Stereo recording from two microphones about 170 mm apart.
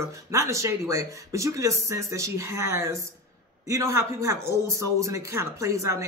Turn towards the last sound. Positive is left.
turn(degrees=-20)  # may be behind; listen again after turning